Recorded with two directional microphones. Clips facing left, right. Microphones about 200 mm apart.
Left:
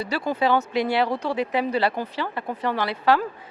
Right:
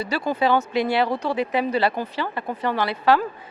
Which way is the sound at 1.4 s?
10° right (ahead or behind).